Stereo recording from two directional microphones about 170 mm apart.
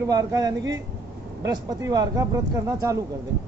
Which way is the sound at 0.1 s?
20° right (ahead or behind).